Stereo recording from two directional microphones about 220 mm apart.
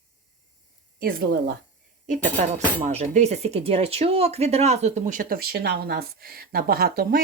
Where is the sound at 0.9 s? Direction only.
40° right (ahead or behind).